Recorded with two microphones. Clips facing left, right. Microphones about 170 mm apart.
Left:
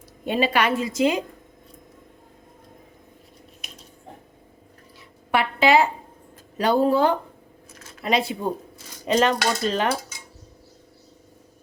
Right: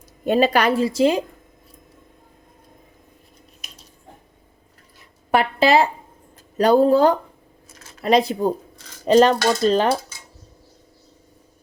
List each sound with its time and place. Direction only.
0.3 s a woman's voice: 40° right (ahead or behind)
5.3 s a woman's voice: 40° right (ahead or behind)